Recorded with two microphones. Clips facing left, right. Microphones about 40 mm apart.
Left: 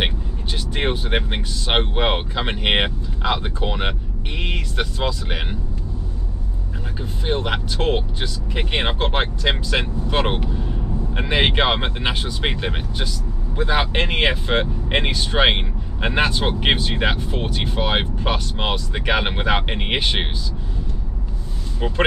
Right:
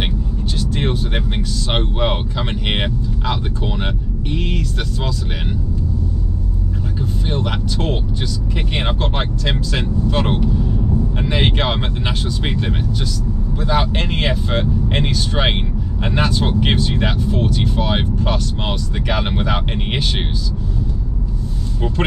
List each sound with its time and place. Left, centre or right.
0.6 s speech: left
7.0 s speech: left
21.8 s speech: centre